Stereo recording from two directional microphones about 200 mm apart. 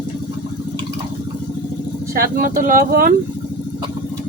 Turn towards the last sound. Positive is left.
turn(degrees=-45)  # may be behind; listen again after turning